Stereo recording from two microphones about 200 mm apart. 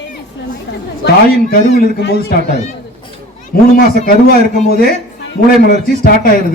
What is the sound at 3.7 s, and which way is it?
A man's voice, 45° left (ahead or behind).